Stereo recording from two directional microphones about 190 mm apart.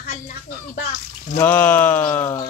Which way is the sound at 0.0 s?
55° left (ahead or behind).